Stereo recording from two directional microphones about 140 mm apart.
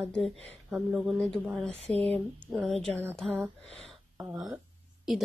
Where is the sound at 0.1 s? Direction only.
Centre (ahead or behind).